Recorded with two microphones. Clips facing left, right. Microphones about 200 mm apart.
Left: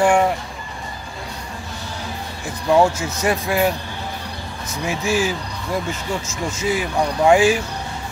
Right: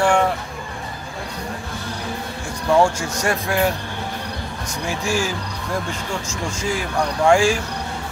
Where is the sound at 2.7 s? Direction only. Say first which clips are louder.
Left 1 dB; 5° left (ahead or behind).